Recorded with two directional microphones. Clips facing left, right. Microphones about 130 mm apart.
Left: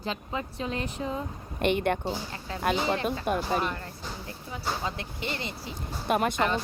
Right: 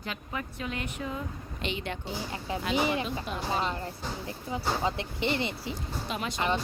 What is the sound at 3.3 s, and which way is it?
Speech, 55° left (ahead or behind).